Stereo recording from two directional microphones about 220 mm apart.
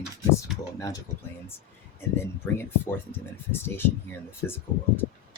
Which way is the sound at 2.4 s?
10° left (ahead or behind).